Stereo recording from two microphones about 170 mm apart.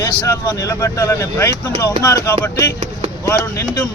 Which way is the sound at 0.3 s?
15° left (ahead or behind).